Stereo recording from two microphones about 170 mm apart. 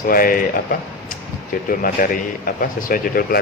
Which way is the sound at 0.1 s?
55° left (ahead or behind).